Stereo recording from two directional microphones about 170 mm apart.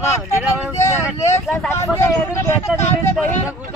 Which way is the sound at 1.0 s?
15° left (ahead or behind).